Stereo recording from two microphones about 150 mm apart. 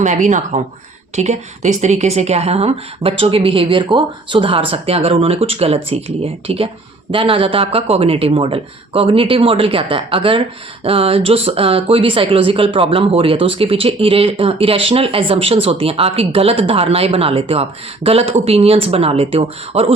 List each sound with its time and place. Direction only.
0.0 s speech: 55° right (ahead or behind)